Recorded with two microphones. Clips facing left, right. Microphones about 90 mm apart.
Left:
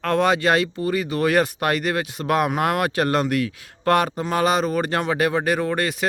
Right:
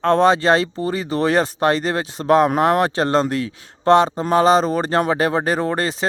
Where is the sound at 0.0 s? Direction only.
30° right (ahead or behind).